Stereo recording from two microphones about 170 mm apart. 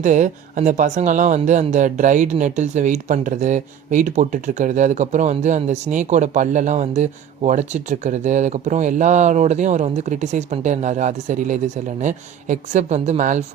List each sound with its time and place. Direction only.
0.0 s speech: 45° right (ahead or behind)